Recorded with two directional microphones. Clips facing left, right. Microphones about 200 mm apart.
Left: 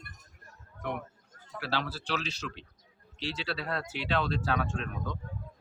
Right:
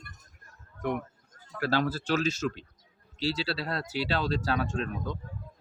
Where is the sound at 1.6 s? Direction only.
45° right (ahead or behind).